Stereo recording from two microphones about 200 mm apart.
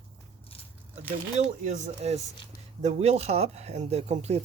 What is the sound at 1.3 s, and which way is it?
Speech, 35° right (ahead or behind).